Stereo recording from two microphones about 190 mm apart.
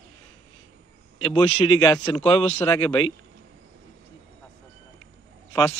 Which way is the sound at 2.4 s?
10° left (ahead or behind).